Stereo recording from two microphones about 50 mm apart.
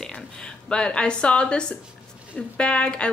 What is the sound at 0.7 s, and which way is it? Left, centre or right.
A woman's voice, centre.